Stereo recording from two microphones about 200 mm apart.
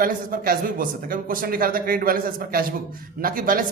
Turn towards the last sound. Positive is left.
turn(degrees=-45)  # may be behind; listen again after turning